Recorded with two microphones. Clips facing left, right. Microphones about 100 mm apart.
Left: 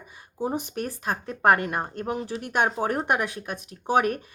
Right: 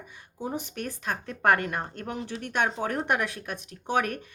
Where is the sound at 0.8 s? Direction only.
35° left (ahead or behind).